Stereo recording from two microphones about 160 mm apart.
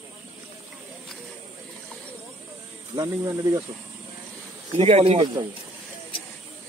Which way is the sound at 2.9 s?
25° right (ahead or behind).